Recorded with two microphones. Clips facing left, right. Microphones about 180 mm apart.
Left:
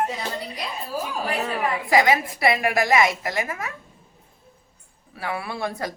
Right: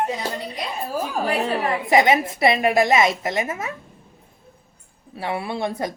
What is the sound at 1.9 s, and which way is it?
A woman's voice, 25° right (ahead or behind).